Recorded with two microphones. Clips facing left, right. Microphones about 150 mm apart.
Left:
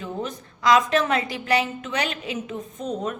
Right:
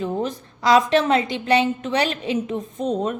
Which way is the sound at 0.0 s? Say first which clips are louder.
Right 6 dB; 35° right (ahead or behind).